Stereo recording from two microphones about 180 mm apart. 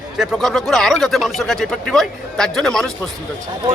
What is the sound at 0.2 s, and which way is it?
Speech, centre (ahead or behind).